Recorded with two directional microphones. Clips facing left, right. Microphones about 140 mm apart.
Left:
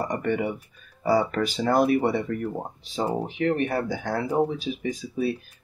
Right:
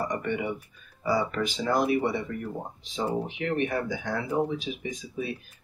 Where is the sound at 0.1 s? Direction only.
45° left (ahead or behind).